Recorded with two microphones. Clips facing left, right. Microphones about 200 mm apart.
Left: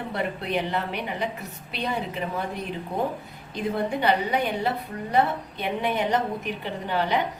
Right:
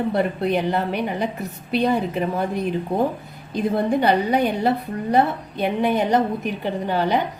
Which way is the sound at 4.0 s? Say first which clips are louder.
Right 4 dB; 40° right (ahead or behind).